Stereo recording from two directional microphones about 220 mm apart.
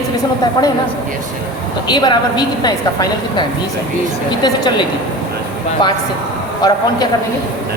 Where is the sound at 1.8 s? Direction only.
20° left (ahead or behind).